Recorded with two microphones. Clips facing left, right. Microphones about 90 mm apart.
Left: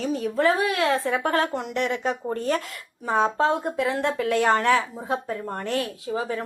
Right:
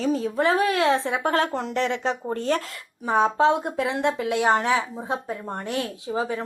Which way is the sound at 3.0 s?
20° right (ahead or behind).